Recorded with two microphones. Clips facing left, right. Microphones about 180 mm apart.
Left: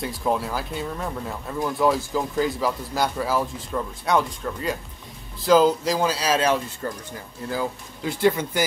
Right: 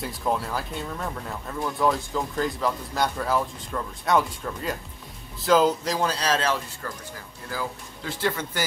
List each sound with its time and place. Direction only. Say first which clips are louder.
0.0 s speech: left 2 dB; centre (ahead or behind)
6.8 s speech: left 5 dB; 25° left (ahead or behind)
8.1 s speech: left 7 dB; 15° left (ahead or behind)